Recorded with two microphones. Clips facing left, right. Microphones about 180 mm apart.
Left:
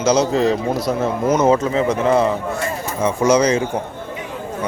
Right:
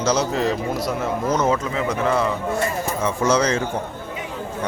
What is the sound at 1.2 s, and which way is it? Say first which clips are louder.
Speech: left 6 dB; 25° left (ahead or behind).